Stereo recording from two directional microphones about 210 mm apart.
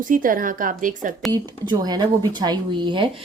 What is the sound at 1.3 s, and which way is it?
Speech, 20° right (ahead or behind).